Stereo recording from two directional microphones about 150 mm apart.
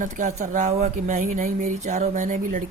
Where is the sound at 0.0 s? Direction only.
50° right (ahead or behind).